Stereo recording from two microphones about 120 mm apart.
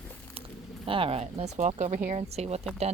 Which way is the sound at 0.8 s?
50° right (ahead or behind).